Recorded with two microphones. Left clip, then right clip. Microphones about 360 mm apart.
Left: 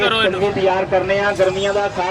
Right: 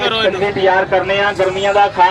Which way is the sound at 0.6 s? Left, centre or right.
Right.